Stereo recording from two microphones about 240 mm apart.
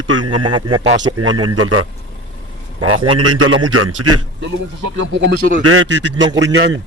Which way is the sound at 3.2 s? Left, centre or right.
Right.